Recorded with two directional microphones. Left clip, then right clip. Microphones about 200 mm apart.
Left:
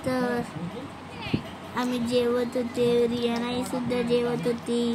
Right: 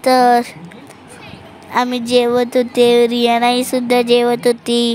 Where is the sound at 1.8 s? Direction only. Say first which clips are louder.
Right 12 dB; 50° right (ahead or behind).